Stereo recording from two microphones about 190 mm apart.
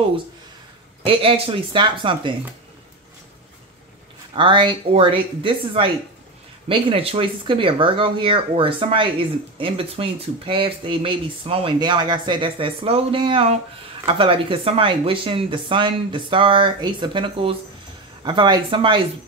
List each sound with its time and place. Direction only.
1.0 s speech: 30° right (ahead or behind)
4.4 s speech: 25° right (ahead or behind)